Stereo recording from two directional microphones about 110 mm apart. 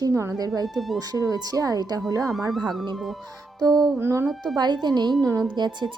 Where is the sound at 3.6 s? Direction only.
35° right (ahead or behind).